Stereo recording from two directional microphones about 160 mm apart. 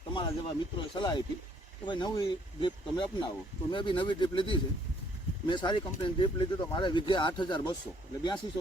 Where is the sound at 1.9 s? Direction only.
25° left (ahead or behind).